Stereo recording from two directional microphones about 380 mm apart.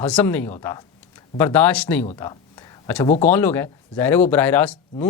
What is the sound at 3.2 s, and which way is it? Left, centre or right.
Speech, centre.